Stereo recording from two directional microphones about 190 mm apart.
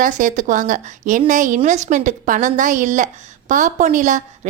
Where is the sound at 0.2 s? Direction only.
40° right (ahead or behind).